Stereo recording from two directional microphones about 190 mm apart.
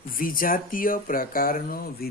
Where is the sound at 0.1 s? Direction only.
50° left (ahead or behind).